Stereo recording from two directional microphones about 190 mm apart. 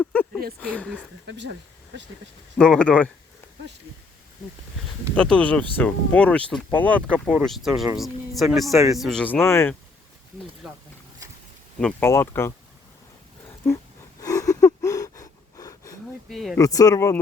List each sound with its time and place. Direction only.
0.0 s a sound: 10° left (ahead or behind)
0.6 s speech: 5° left (ahead or behind)
2.6 s speech: 5° left (ahead or behind)
5.1 s speech: 5° left (ahead or behind)
11.8 s speech: 5° left (ahead or behind)
14.2 s gasp: 20° left (ahead or behind)
16.3 s speech: centre (ahead or behind)
16.6 s speech: 20° left (ahead or behind)